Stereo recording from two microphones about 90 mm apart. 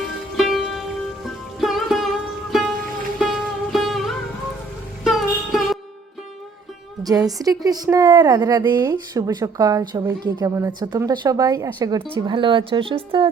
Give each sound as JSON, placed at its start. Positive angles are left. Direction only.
{"t": 0.3, "sound": "music", "side_deg": 0}
{"t": 7.0, "sound": "a woman's voice", "side_deg": -45}
{"t": 8.8, "sound": "speech", "side_deg": -40}
{"t": 10.2, "sound": "a woman's voice", "side_deg": -50}
{"t": 12.1, "sound": "speech", "side_deg": -75}